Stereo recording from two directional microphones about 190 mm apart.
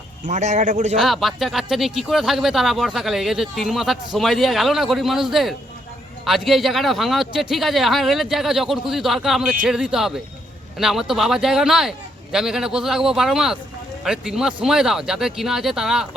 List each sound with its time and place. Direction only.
0.3 s speech: 40° right (ahead or behind)
0.9 s speech: centre (ahead or behind)